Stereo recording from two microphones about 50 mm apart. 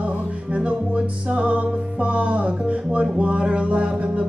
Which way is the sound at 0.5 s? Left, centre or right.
Right.